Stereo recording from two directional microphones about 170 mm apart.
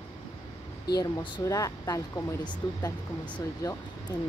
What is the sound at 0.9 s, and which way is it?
Speech, 20° left (ahead or behind).